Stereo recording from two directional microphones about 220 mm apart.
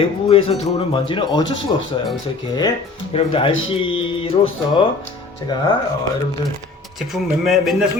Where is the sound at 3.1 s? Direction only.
25° left (ahead or behind).